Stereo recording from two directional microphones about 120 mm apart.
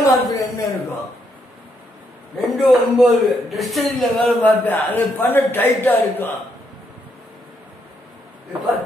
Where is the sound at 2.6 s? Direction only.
Centre (ahead or behind); by 6.3 s 15° left (ahead or behind).